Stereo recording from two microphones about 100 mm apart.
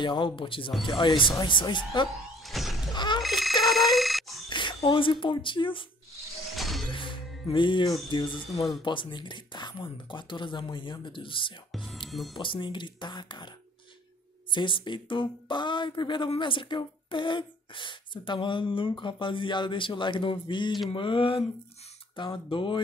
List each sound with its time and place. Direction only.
0.0 s speech: 55° left (ahead or behind)
2.4 s shatter: centre (ahead or behind)
2.9 s speech: 50° left (ahead or behind)
3.2 s speech: centre (ahead or behind)
3.6 s a sound: centre (ahead or behind)
4.5 s speech: 50° left (ahead or behind)
6.5 s music: centre (ahead or behind)
6.9 s music: 55° left (ahead or behind)
8.1 s speech: 55° left (ahead or behind)
11.7 s speech: centre (ahead or behind)
12.4 s speech: 55° left (ahead or behind)
14.5 s speech: 55° left (ahead or behind)
22.1 s speech: 55° left (ahead or behind)